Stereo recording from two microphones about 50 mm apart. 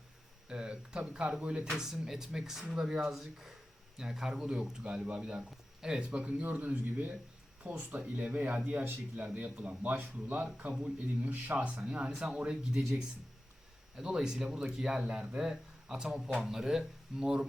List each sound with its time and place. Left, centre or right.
0.4 s a sound: centre
1.4 s speech: right
1.8 s speech: centre; by 10.8 s right
10.8 s speech: centre
11.3 s speech: right
14.0 s speech: centre